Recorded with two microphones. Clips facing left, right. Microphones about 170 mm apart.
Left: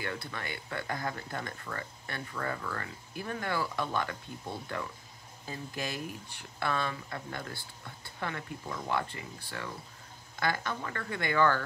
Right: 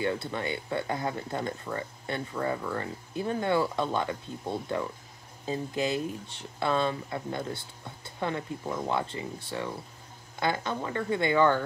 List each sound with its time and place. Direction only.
0.0 s speech: 25° right (ahead or behind)